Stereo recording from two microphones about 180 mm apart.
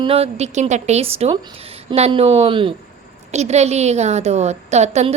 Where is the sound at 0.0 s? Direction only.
35° right (ahead or behind).